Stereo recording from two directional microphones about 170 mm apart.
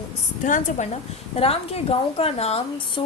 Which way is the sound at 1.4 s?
35° left (ahead or behind).